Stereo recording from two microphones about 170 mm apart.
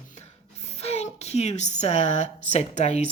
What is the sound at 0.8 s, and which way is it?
Speech, 40° left (ahead or behind).